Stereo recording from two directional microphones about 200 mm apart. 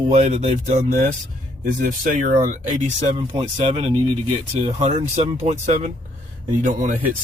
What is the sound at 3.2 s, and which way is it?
Speech, 25° right (ahead or behind).